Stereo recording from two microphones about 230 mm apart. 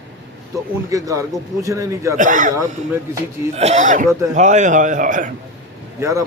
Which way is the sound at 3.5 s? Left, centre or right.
Right.